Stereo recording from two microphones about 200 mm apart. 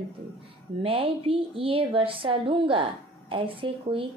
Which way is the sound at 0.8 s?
30° right (ahead or behind).